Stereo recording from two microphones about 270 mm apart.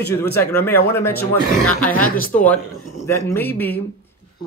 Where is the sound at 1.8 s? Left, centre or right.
Left.